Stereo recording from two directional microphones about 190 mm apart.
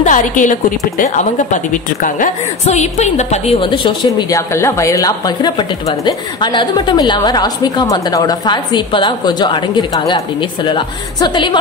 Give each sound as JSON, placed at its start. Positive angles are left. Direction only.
{"t": 0.0, "sound": "a woman's voice", "side_deg": 40}